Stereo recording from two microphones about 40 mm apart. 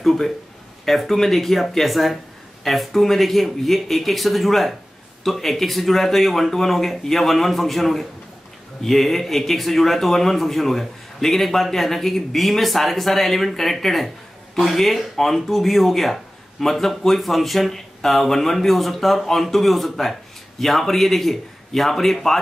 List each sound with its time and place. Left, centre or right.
0.0 s a man's voice: centre